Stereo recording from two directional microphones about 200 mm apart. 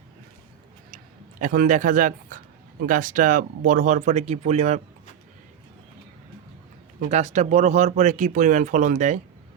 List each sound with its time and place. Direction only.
1.4 s speech: 40° right (ahead or behind)
7.0 s speech: 35° right (ahead or behind)